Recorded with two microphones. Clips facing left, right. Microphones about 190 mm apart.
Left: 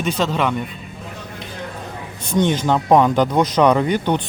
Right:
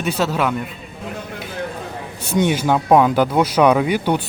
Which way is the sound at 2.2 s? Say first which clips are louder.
Even; 10° right (ahead or behind).